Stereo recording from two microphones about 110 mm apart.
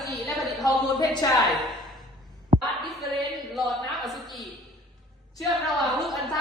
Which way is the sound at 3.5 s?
Centre (ahead or behind).